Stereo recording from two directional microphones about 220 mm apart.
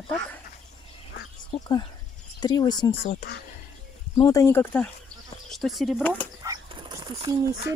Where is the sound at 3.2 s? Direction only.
35° left (ahead or behind).